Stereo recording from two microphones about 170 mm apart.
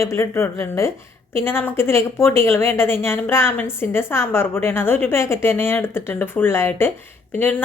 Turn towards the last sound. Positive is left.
turn(degrees=10)  # may be behind; listen again after turning